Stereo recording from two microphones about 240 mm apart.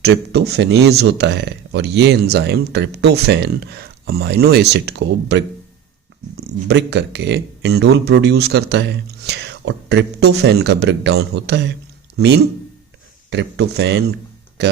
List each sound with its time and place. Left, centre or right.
0.0 s speech: right
6.7 s speech: right